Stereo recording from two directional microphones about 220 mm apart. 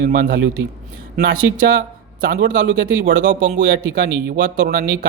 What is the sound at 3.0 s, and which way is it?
Speech, 35° right (ahead or behind).